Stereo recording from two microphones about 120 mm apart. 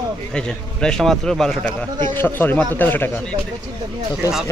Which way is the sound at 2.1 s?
15° left (ahead or behind).